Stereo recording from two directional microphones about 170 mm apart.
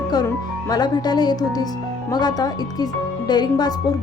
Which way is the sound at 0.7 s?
25° left (ahead or behind).